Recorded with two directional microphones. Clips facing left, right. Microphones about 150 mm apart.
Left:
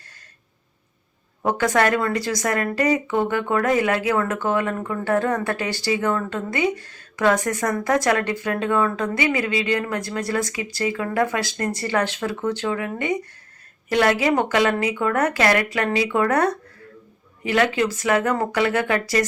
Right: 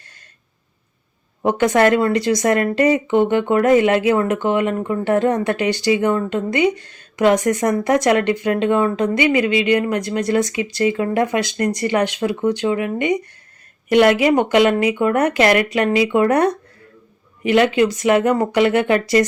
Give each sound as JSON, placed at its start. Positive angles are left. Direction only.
{"t": 1.4, "sound": "speech", "side_deg": -20}